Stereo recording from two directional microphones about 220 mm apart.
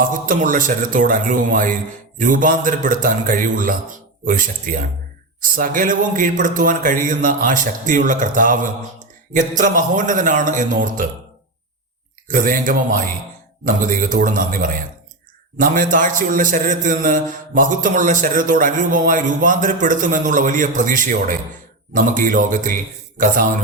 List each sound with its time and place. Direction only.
0.1 s a man's voice: 35° right (ahead or behind)
12.3 s a man's voice: 40° right (ahead or behind)